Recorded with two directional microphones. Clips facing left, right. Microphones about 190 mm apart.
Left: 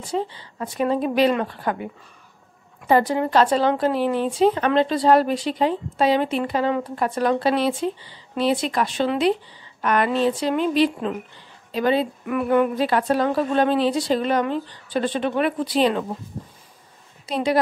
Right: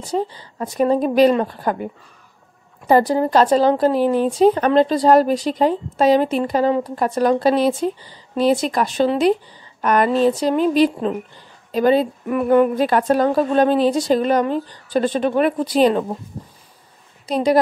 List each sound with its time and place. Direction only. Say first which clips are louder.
0.0 s a woman's voice: right 3 dB; 40° right (ahead or behind)
2.9 s a woman's voice: right 3 dB; 35° right (ahead or behind)
17.3 s a woman's voice: right 5 dB; 40° right (ahead or behind)